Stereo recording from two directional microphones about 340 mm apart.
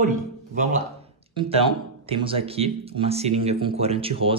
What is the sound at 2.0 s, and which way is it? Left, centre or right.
Speech, centre.